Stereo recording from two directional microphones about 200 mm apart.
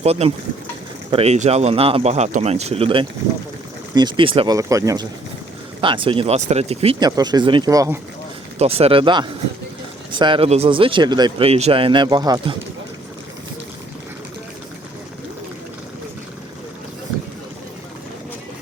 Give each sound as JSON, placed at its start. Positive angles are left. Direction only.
{"t": 0.0, "sound": "speech", "side_deg": -30}
{"t": 8.5, "sound": "speech", "side_deg": -30}